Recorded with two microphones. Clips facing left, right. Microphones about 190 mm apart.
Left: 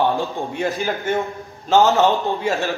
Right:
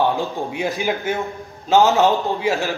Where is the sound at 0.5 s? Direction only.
10° right (ahead or behind).